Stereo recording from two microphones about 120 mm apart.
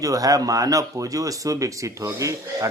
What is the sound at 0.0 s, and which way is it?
A man's voice, 30° right (ahead or behind).